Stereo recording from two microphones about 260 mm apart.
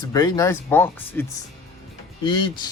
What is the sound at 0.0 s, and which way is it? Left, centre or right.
A man's voice, centre.